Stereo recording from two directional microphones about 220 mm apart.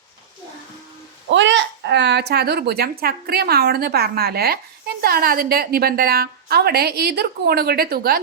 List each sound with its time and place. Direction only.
1.3 s a woman's voice: 55° right (ahead or behind)